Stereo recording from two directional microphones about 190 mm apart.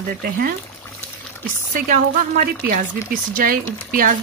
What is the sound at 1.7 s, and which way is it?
Speech, 45° right (ahead or behind).